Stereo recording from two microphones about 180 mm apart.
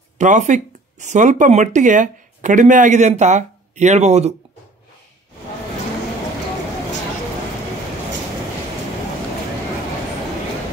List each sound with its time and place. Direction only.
0.2 s speech: 45° right (ahead or behind)